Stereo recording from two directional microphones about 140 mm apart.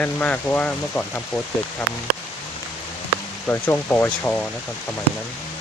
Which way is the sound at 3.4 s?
15° left (ahead or behind).